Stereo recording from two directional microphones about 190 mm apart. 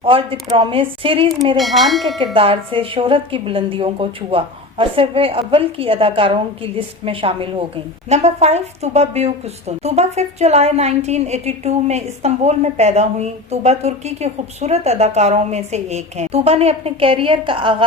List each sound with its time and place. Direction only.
0.0 s a woman's voice: 30° right (ahead or behind)
1.5 s bell: centre (ahead or behind)
2.3 s a woman's voice: 30° right (ahead or behind)